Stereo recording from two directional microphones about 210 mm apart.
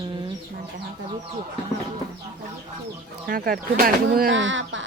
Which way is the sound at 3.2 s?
45° right (ahead or behind).